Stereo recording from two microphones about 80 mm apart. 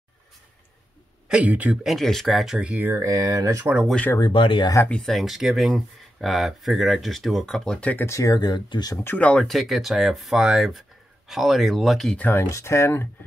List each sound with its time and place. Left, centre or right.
1.3 s speech: centre
1.8 s speech: centre
2.9 s speech: right
4.2 s speech: left
4.8 s speech: centre
7.8 s speech: left
8.1 s speech: left
8.4 s speech: left
8.9 s speech: left
9.2 s speech: centre
9.5 s speech: centre
12.2 s speech: left
12.4 s speech: left